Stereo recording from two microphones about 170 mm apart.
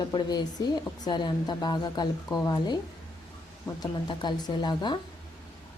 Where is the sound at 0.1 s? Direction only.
25° left (ahead or behind).